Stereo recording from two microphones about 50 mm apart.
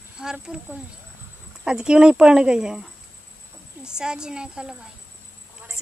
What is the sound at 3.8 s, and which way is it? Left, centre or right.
Speech, centre.